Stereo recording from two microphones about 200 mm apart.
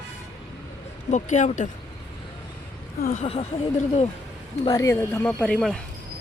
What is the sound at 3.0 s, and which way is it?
Speech, 35° left (ahead or behind).